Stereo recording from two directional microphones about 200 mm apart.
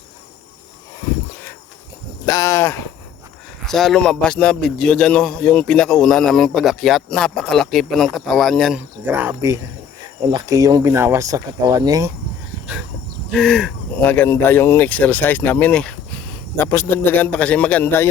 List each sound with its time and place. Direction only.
2.2 s speech: 15° left (ahead or behind)
3.7 s a man's voice: centre (ahead or behind); by 12.1 s 15° right (ahead or behind)
13.3 s a man's voice: centre (ahead or behind)